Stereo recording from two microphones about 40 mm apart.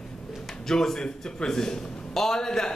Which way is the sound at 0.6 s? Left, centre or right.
Centre.